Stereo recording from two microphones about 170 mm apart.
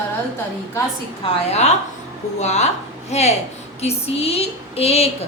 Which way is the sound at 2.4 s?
40° left (ahead or behind).